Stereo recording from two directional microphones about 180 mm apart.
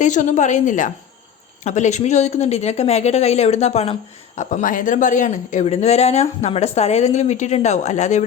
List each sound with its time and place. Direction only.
0.0 s a woman's voice: 45° left (ahead or behind)